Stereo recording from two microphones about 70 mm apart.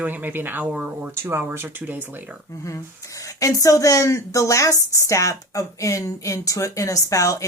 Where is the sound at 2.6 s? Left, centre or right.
Left.